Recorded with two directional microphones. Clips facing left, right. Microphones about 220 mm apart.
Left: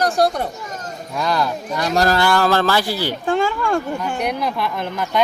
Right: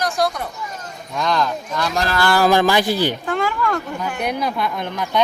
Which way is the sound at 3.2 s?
30° left (ahead or behind).